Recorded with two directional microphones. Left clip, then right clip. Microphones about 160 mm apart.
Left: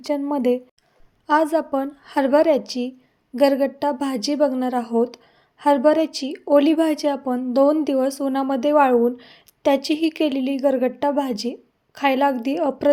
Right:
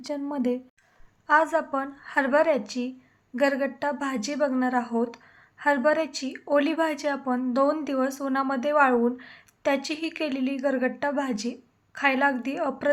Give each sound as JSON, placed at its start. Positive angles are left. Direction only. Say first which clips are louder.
{"t": 0.0, "sound": "a woman's voice", "louder": "left 8 dB", "side_deg": 30}
{"t": 1.3, "sound": "a woman's voice", "louder": "left 3 dB", "side_deg": 45}